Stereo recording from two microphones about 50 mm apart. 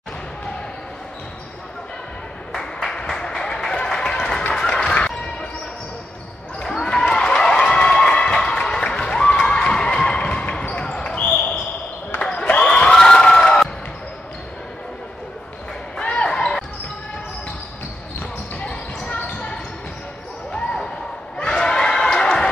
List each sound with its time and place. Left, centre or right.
2.5 s applause: centre
4.4 s music: left
6.6 s basketball bounce: centre
12.2 s a sound: left
16.0 s basketball bounce: centre
18.6 s basketball bounce: left
20.5 s basketball bounce: centre
21.4 s a sound: centre